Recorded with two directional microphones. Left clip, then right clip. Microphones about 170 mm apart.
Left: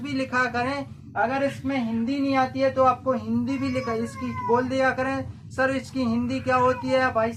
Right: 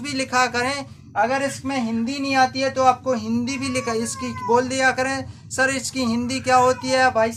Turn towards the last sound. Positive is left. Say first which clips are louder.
# right 4 dB
turn(degrees=-25)  # may be behind; listen again after turning